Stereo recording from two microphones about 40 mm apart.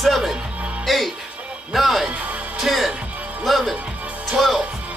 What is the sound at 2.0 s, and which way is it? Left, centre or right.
Music, right.